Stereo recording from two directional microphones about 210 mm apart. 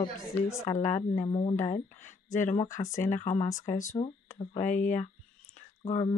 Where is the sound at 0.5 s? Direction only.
15° left (ahead or behind).